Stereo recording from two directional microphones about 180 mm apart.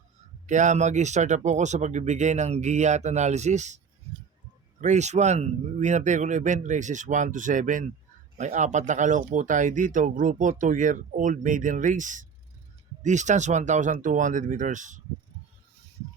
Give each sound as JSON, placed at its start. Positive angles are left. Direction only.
{"t": 0.4, "sound": "speech", "side_deg": -40}
{"t": 4.8, "sound": "speech", "side_deg": -40}